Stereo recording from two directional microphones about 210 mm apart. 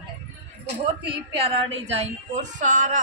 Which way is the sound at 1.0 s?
25° right (ahead or behind).